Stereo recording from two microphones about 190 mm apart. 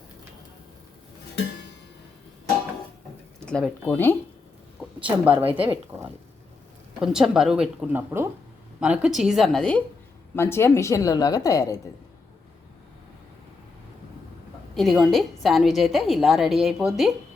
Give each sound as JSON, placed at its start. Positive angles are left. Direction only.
{"t": 3.4, "sound": "speech", "side_deg": 5}
{"t": 4.9, "sound": "speech", "side_deg": -10}
{"t": 5.5, "sound": "a woman's voice", "side_deg": -25}
{"t": 7.0, "sound": "a woman's voice", "side_deg": -5}
{"t": 14.8, "sound": "a woman's voice", "side_deg": 0}